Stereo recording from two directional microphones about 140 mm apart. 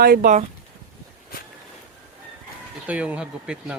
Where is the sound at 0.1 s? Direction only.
90° right.